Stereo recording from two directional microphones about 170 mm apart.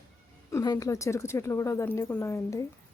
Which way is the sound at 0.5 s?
20° left (ahead or behind).